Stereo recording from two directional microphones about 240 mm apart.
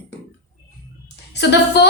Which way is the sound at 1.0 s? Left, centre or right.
Left.